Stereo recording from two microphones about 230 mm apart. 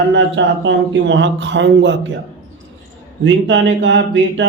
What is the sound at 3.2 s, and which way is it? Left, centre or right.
Speech, right.